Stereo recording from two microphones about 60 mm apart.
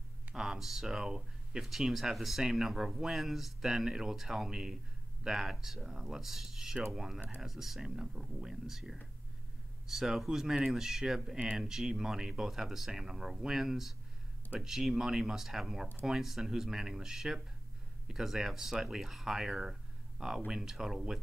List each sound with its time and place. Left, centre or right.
0.3 s speech: centre
7.2 s speech: right
7.4 s speech: centre